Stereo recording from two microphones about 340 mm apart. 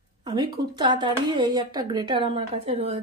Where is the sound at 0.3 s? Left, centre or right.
Centre.